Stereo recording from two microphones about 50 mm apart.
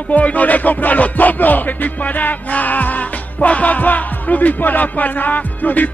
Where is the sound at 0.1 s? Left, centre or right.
Left.